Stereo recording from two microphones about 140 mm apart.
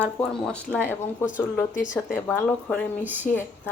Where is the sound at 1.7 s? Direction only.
65° left (ahead or behind).